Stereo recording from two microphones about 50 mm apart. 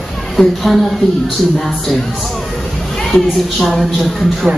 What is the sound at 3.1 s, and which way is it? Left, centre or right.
A man's voice, centre.